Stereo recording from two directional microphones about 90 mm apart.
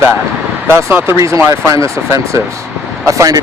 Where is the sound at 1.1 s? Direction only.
35° right (ahead or behind).